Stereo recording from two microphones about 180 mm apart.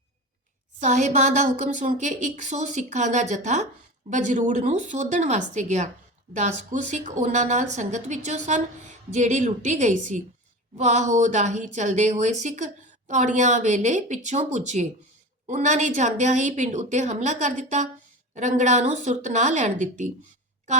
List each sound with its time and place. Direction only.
0.8 s a woman's voice: 40° right (ahead or behind)